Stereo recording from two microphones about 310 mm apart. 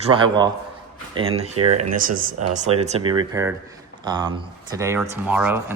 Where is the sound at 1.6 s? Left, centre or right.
Right.